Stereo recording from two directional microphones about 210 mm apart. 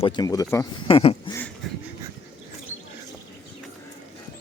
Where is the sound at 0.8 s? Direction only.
25° left (ahead or behind).